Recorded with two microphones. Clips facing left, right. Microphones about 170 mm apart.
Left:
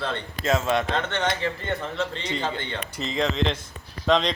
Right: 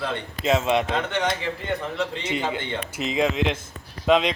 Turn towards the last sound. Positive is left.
turn(degrees=-10)  # may be behind; listen again after turning